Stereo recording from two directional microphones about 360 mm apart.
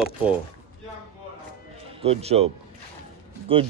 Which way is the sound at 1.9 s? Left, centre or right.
Centre.